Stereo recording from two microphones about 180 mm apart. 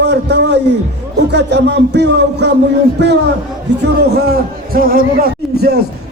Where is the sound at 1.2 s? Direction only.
70° right (ahead or behind).